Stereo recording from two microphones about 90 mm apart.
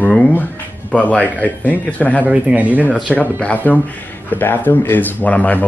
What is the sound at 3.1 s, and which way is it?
Speech, 15° left (ahead or behind).